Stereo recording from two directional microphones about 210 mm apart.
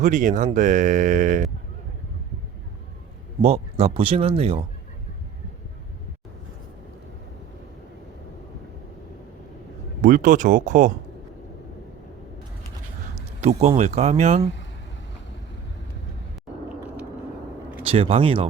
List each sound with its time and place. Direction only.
0.0 s speech: 35° right (ahead or behind)
3.4 s speech: 30° right (ahead or behind)
10.0 s speech: 40° right (ahead or behind)
13.4 s speech: 30° right (ahead or behind)
17.8 s speech: 25° right (ahead or behind)